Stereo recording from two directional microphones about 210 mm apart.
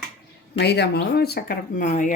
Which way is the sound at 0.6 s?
50° left (ahead or behind).